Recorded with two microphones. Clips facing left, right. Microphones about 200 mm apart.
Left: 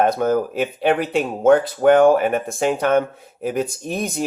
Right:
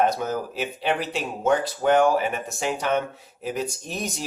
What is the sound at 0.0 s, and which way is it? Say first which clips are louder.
Speech: left 6 dB; 55° left (ahead or behind).